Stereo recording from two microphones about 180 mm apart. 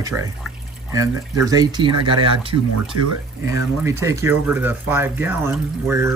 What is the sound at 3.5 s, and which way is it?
Speech, 15° right (ahead or behind).